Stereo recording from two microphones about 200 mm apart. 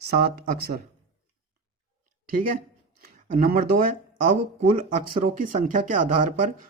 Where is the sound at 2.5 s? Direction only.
45° right (ahead or behind).